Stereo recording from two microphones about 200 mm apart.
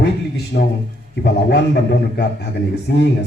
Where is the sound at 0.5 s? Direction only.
45° left (ahead or behind).